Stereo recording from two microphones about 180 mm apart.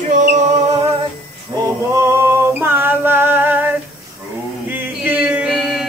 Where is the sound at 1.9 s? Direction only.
15° right (ahead or behind).